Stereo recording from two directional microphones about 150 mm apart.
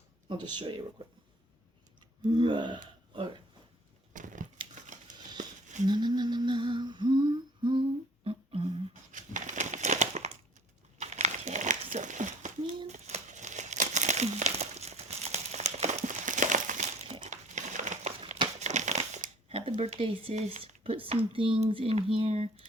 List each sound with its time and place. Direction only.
0.3 s speech: 30° right (ahead or behind)
2.3 s speech: 30° right (ahead or behind)
4.1 s crumpling: 60° right (ahead or behind)
4.9 s a sound: 55° right (ahead or behind)
5.9 s humming: 30° right (ahead or behind)
8.9 s crumpling: 55° right (ahead or behind)
18.2 s crumpling: 45° right (ahead or behind)